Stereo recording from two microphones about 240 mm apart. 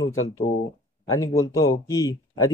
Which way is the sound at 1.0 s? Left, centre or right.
Centre.